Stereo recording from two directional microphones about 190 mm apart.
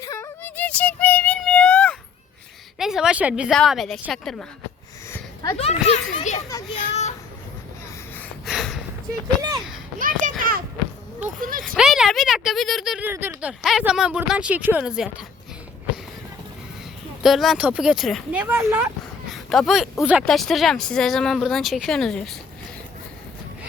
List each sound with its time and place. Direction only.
0.0 s child singing: 15° left (ahead or behind)
2.7 s a woman's voice: centre (ahead or behind)
5.1 s a sound: 20° left (ahead or behind)
5.5 s a child's voice: 35° left (ahead or behind)
8.4 s a sound: centre (ahead or behind)
10.0 s a sound: 45° right (ahead or behind)
11.2 s speech: 45° right (ahead or behind)
11.6 s speech: centre (ahead or behind)
17.2 s speech: centre (ahead or behind)